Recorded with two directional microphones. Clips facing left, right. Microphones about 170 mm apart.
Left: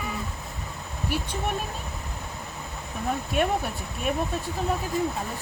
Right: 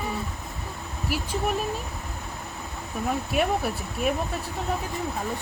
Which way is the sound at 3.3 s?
5° right (ahead or behind).